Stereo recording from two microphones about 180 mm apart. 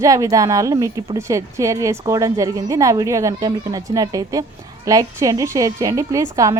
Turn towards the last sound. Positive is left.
turn(degrees=-20)  # may be behind; listen again after turning